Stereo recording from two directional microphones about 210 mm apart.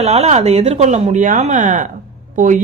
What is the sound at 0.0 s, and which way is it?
A woman's voice, 30° right (ahead or behind).